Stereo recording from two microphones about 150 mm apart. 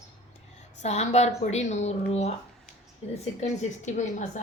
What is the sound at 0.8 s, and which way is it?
A woman's voice, 50° left (ahead or behind).